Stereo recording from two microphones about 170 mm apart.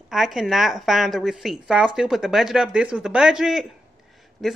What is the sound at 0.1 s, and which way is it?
Speech, centre (ahead or behind).